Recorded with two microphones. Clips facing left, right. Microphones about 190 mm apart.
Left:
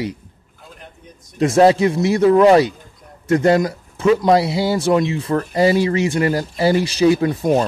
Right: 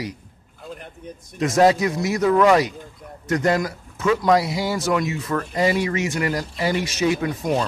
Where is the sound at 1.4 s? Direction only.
30° left (ahead or behind).